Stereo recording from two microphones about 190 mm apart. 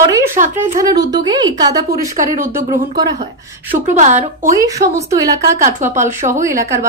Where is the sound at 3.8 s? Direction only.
40° right (ahead or behind).